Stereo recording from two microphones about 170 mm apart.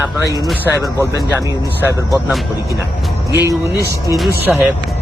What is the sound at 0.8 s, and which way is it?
Speech, 20° right (ahead or behind).